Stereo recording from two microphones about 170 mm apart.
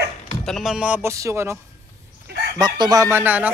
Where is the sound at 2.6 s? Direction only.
25° right (ahead or behind).